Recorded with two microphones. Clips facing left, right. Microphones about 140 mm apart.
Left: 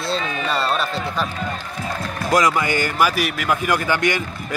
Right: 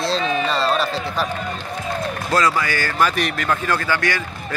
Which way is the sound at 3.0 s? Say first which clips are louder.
Right 3 dB; 5° left (ahead or behind).